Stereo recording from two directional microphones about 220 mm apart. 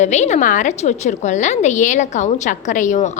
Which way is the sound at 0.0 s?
30° left (ahead or behind).